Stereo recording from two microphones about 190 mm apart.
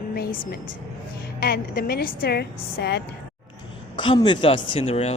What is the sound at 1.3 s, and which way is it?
A woman's voice, 50° left (ahead or behind).